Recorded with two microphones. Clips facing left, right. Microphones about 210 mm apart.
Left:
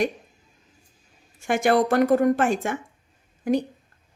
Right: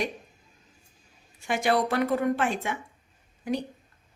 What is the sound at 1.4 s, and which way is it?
A woman's voice, 50° left (ahead or behind).